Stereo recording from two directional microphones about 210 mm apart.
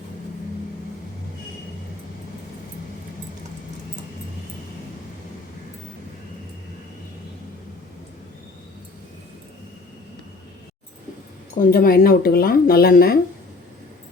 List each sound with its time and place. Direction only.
11.5 s speech: 45° left (ahead or behind)